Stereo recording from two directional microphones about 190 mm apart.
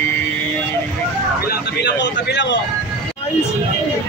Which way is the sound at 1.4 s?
60° left (ahead or behind).